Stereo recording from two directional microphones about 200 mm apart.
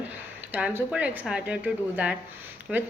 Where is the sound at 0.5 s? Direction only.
5° right (ahead or behind).